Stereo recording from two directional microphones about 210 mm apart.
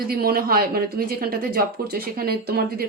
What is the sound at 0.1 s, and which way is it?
Speech, 45° right (ahead or behind).